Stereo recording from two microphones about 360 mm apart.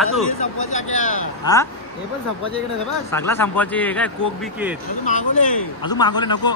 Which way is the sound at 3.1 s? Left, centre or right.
Centre.